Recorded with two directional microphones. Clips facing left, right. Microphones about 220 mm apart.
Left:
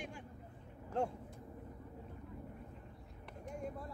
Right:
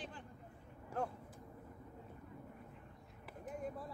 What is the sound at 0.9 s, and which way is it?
Vehicle, 25° left (ahead or behind).